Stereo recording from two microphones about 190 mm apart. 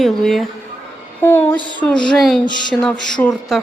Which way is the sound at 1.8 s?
5° left (ahead or behind).